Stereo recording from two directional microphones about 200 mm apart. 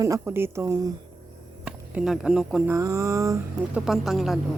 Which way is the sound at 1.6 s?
5° right (ahead or behind).